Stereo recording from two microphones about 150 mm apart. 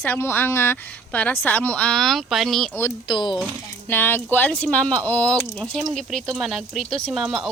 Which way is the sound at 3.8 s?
15° left (ahead or behind).